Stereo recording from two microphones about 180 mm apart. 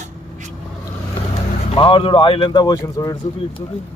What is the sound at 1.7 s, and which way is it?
Speech, 30° left (ahead or behind).